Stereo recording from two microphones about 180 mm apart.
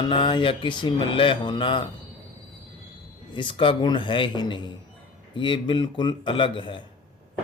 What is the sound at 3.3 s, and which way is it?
Speech, 30° left (ahead or behind).